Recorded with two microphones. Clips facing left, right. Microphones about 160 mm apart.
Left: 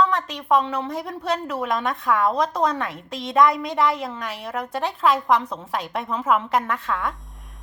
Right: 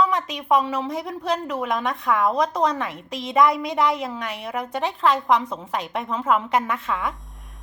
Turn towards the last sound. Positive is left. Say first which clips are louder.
# even
turn(degrees=0)  # may be behind; listen again after turning